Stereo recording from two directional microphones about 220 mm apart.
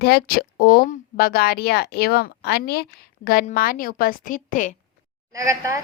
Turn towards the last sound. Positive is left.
turn(degrees=-15)  # may be behind; listen again after turning